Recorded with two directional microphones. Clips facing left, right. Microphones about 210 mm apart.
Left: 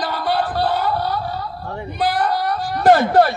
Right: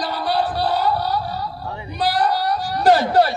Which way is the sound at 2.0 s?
55° left (ahead or behind).